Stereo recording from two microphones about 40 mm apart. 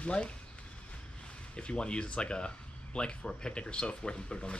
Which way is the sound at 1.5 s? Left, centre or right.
Left.